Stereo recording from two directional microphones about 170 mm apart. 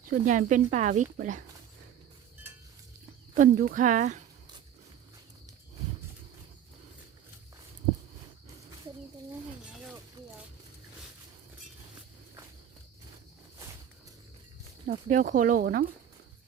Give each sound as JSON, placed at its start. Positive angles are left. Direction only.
{"t": 0.0, "sound": "speech", "side_deg": -50}
{"t": 3.3, "sound": "speech", "side_deg": -55}
{"t": 14.8, "sound": "speech", "side_deg": -55}